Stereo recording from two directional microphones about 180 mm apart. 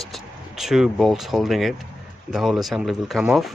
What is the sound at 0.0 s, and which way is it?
Speech, centre (ahead or behind).